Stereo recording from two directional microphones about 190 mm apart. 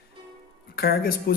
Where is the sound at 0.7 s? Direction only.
55° left (ahead or behind).